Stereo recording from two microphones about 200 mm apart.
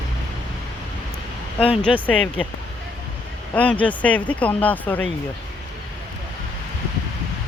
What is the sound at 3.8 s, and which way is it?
Speech, 5° left (ahead or behind).